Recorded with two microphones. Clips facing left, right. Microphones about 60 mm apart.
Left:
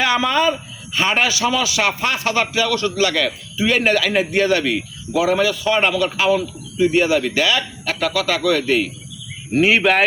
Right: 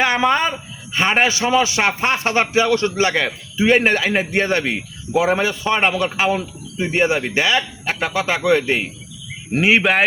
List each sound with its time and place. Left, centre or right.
0.0 s a man's voice: right
9.6 s speech: centre